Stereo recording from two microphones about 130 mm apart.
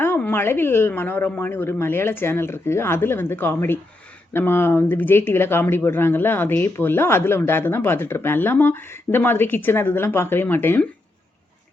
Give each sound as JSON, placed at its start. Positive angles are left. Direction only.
{"t": 0.0, "sound": "speech", "side_deg": 15}